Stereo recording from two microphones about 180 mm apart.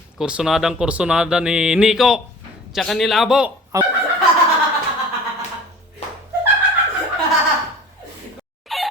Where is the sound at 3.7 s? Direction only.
20° right (ahead or behind).